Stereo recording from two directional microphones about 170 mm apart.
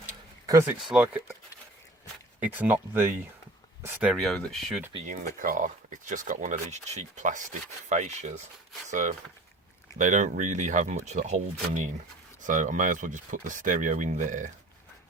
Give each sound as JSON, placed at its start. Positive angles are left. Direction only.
{"t": 0.0, "sound": "a sound", "side_deg": -20}
{"t": 0.8, "sound": "speech", "side_deg": -5}
{"t": 2.4, "sound": "speech", "side_deg": -10}
{"t": 4.1, "sound": "speech", "side_deg": 0}
{"t": 5.0, "sound": "speech", "side_deg": -50}
{"t": 12.5, "sound": "speech", "side_deg": -50}